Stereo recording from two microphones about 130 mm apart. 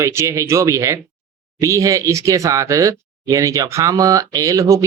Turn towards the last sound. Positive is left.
turn(degrees=-25)  # may be behind; listen again after turning